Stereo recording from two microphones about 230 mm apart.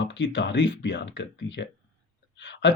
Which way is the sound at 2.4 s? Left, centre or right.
Left.